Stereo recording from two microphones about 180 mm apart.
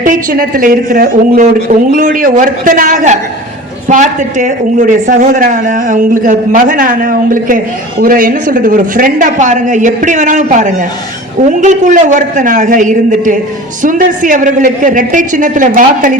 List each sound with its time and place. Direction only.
0.0 s a man's voice: 50° right (ahead or behind)